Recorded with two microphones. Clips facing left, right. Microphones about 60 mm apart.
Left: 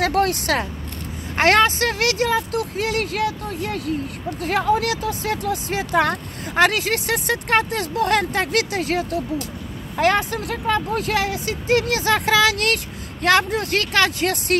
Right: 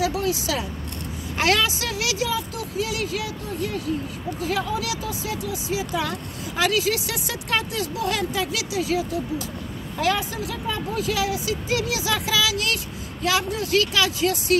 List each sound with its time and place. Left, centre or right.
0.0 s speech: left